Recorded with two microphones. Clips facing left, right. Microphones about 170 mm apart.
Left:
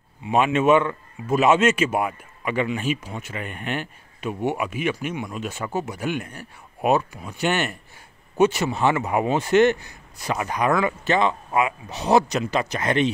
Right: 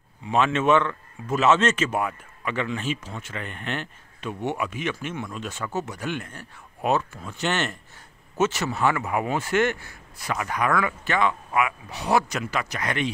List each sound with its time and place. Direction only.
0.3 s a man's voice: 15° left (ahead or behind)